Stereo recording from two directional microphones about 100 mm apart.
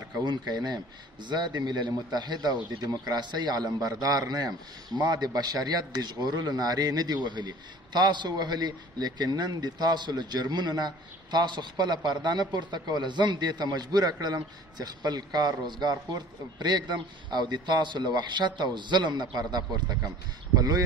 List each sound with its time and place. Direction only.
0.2 s speech: 45° right (ahead or behind)